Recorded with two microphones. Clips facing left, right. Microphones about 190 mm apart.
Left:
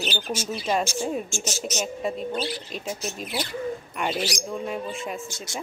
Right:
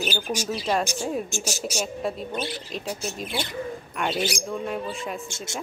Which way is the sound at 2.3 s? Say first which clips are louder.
Left 1 dB; 20° right (ahead or behind).